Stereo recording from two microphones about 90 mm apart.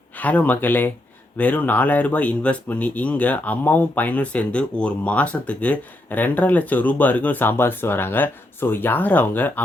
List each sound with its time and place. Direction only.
0.2 s speech: 20° left (ahead or behind)